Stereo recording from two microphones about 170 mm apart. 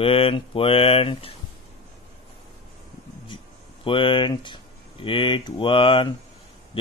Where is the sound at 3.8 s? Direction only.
30° left (ahead or behind).